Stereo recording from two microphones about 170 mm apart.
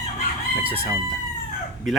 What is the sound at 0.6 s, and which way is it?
Chicken, 35° right (ahead or behind).